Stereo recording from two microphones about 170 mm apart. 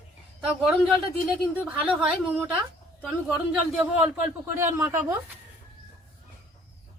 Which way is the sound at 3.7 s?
10° right (ahead or behind).